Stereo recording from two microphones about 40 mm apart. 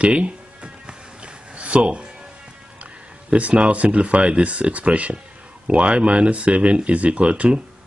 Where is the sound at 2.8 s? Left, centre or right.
Right.